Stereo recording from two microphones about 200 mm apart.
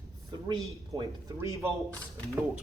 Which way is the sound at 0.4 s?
20° right (ahead or behind).